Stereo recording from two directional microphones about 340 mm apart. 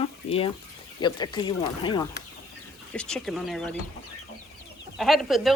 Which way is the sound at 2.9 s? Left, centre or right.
Centre.